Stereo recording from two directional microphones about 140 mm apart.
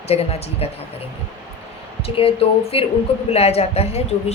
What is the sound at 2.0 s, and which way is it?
A woman's voice, 40° left (ahead or behind).